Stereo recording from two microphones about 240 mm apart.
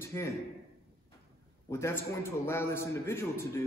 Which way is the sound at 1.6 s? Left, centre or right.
Centre.